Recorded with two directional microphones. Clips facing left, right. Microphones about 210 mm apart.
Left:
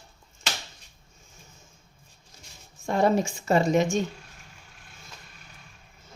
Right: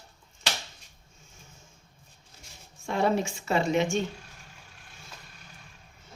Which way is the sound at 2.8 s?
45° left (ahead or behind).